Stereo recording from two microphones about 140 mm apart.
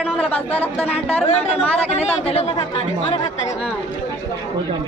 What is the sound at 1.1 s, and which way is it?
Speech, 50° left (ahead or behind).